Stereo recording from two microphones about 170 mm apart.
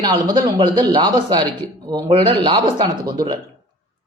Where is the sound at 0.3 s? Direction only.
25° right (ahead or behind).